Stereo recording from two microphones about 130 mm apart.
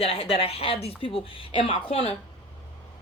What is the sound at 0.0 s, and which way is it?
Speech, 50° left (ahead or behind).